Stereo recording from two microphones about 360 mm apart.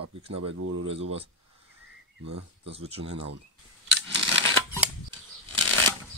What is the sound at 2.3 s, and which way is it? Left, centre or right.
Speech, right.